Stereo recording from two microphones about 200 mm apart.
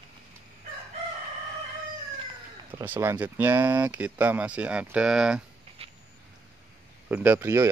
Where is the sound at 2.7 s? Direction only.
10° right (ahead or behind).